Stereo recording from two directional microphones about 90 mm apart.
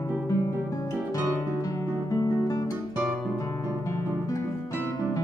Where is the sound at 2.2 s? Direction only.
45° left (ahead or behind).